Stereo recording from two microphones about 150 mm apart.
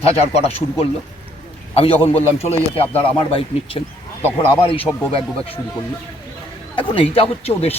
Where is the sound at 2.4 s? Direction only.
45° left (ahead or behind).